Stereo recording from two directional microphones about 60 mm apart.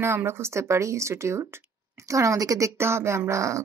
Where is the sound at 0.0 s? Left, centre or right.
Right.